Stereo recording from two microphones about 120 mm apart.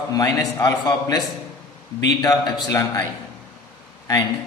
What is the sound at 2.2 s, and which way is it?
Speech, 30° left (ahead or behind).